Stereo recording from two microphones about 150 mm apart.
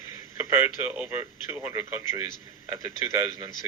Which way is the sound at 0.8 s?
10° right (ahead or behind).